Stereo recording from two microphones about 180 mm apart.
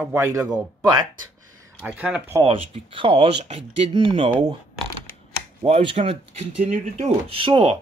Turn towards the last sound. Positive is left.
turn(degrees=-30)  # may be behind; listen again after turning